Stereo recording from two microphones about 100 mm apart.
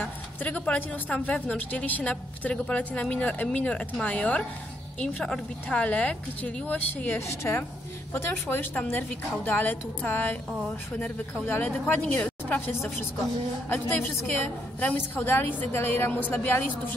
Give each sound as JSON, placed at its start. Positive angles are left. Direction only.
{"t": 0.0, "sound": "a woman's voice", "side_deg": 15}
{"t": 7.2, "sound": "a woman's voice", "side_deg": 25}
{"t": 11.4, "sound": "a woman's voice", "side_deg": 20}